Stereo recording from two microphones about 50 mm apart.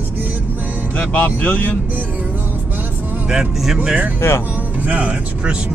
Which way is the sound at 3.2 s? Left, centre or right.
Centre.